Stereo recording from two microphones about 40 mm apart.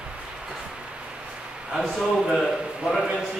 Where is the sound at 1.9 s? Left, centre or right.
Centre.